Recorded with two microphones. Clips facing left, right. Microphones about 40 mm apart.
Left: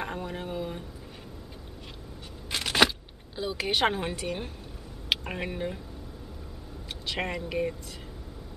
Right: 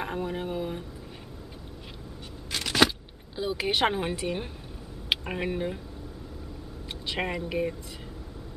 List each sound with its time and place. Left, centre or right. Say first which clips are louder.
0.0 s speech: right 3 dB; centre
2.5 s a sound: even; centre
3.3 s speech: right 1 dB; centre
7.1 s speech: right 1 dB; centre